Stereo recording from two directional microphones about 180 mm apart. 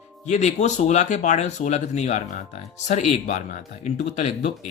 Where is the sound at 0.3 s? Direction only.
40° left (ahead or behind).